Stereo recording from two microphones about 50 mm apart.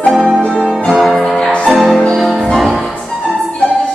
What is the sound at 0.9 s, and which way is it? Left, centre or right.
Music, centre.